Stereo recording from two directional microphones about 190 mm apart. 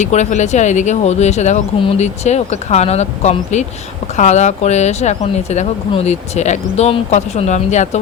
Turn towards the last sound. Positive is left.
turn(degrees=35)  # may be behind; listen again after turning